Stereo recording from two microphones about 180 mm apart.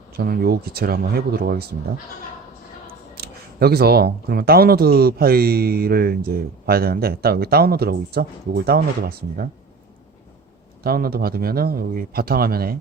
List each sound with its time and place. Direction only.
0.1 s speech: 60° right (ahead or behind)
2.8 s speech: 60° right (ahead or behind)
10.8 s speech: 55° right (ahead or behind)